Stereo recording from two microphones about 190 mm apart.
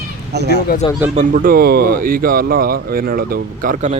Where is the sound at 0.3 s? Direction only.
60° right (ahead or behind).